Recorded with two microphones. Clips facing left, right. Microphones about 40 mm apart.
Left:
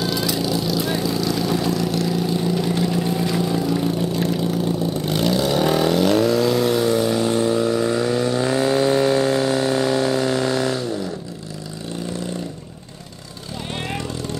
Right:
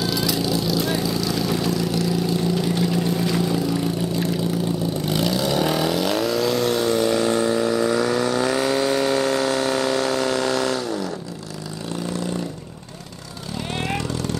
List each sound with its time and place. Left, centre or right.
0.0 s vehicle: centre
7.2 s vehicle: right
8.0 s vehicle: right
8.5 s a sound: centre
9.9 s vehicle: centre